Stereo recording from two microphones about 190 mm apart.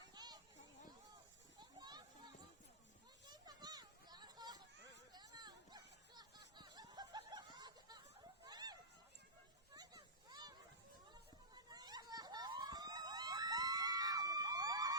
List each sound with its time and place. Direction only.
0.1 s children playing: 20° right (ahead or behind)
1.5 s children playing: 20° right (ahead or behind)
3.2 s a sound: 20° right (ahead or behind)
6.6 s snicker: 20° right (ahead or behind)
8.4 s a sound: 20° right (ahead or behind)
11.1 s emergency vehicle: 20° right (ahead or behind)